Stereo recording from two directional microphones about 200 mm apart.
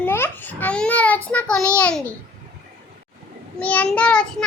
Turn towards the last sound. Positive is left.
turn(degrees=5)  # may be behind; listen again after turning